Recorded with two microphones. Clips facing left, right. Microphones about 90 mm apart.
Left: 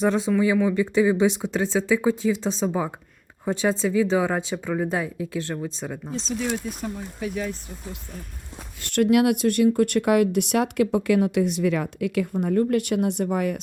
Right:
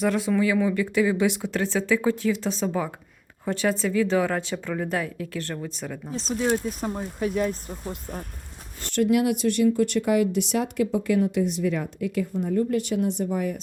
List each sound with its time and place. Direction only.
0.0 s speech: 25° left (ahead or behind)
6.6 s speech: 30° right (ahead or behind)
7.2 s speech: 50° right (ahead or behind)
8.8 s speech: 60° left (ahead or behind); by 12.3 s 85° left
12.3 s speech: 65° left (ahead or behind)